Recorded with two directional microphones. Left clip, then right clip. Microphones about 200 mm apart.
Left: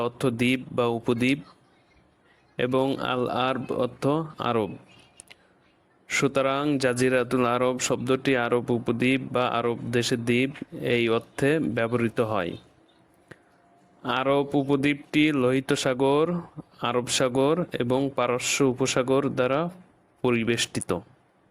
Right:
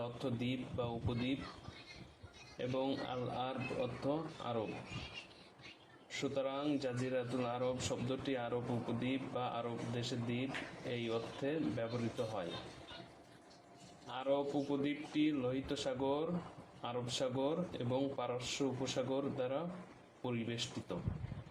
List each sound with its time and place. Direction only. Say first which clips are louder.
0.0 s speech: left 16 dB; 50° left (ahead or behind)
2.6 s speech: left 14 dB; 45° left (ahead or behind)
6.1 s speech: left 16 dB; 55° left (ahead or behind)
14.1 s speech: left 13 dB; 50° left (ahead or behind)